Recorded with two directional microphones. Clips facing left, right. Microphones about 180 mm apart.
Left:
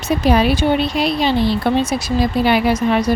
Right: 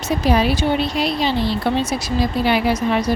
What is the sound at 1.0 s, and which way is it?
Speech, 60° left (ahead or behind).